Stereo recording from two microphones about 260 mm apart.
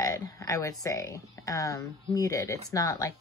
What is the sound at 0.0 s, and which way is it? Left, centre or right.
Speech, centre.